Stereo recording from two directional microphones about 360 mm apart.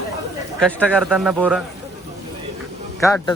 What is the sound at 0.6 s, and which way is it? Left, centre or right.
Speech, centre.